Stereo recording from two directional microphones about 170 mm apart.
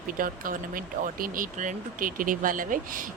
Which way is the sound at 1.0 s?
50° right (ahead or behind).